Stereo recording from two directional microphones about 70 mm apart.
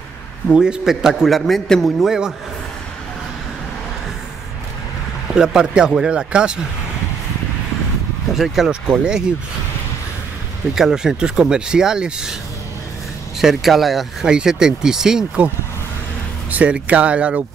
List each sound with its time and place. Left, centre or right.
0.5 s a man's voice: centre
5.3 s speech: centre
8.4 s a man's voice: centre
10.7 s speech: centre
13.4 s a man's voice: centre
16.4 s speech: right